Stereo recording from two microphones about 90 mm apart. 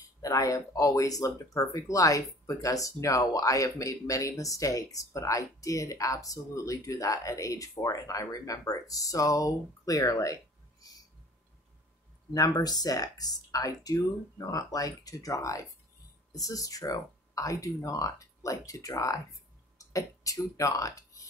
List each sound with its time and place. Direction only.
0.0 s speech: 40° left (ahead or behind)
12.4 s speech: 45° left (ahead or behind)